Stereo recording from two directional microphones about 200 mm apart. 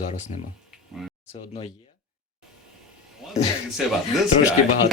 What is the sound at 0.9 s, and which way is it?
Speech, centre (ahead or behind).